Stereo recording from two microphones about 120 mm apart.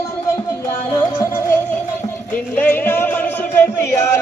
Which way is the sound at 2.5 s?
15° left (ahead or behind).